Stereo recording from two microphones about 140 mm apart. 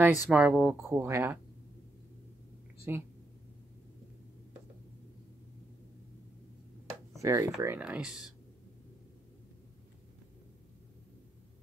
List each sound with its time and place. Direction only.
0.0 s speech: 10° right (ahead or behind)
2.9 s speech: 15° right (ahead or behind)
7.2 s speech: 20° right (ahead or behind)
7.6 s speech: 10° right (ahead or behind)